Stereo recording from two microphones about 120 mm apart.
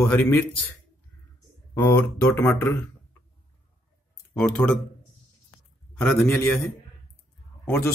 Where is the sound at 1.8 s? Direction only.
20° left (ahead or behind).